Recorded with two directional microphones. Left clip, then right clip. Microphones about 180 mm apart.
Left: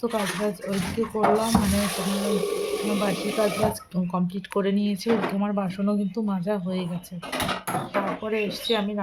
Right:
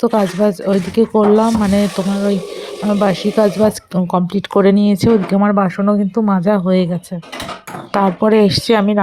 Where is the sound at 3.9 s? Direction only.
40° right (ahead or behind).